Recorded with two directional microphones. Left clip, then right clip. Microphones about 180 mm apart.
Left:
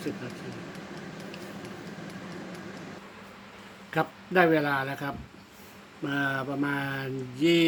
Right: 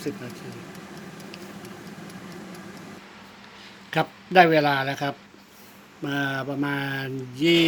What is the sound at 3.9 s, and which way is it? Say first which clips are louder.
Speech: right 7 dB; 40° right (ahead or behind).